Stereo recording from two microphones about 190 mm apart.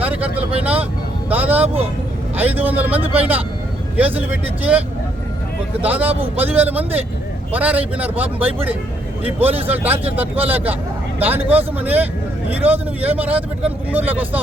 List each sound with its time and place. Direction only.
0.0 s vehicle: 10° right (ahead or behind)
1.3 s a man's voice: 10° right (ahead or behind)
5.8 s a man's voice: 10° right (ahead or behind)
6.1 s a man's voice: 30° right (ahead or behind)
6.4 s a man's voice: 10° right (ahead or behind)